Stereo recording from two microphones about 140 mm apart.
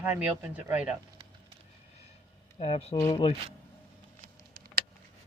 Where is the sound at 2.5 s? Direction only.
45° left (ahead or behind).